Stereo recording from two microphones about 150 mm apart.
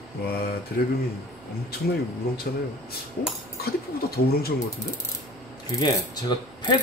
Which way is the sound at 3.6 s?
90° left.